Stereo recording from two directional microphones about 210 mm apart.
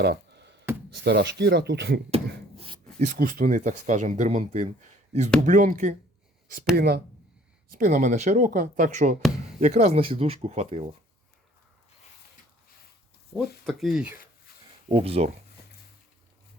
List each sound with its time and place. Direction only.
0.0 s music: 55° right (ahead or behind)
1.0 s speech: 55° right (ahead or behind)
2.6 s a sound: 25° right (ahead or behind)
3.1 s speech: 45° right (ahead or behind)
6.7 s speech: 50° right (ahead or behind)
7.7 s speech: 40° right (ahead or behind)
13.7 s speech: centre (ahead or behind)
14.8 s speech: 25° right (ahead or behind)